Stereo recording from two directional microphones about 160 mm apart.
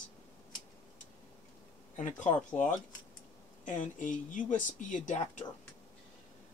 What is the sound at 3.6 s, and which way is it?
Speech, 50° left (ahead or behind).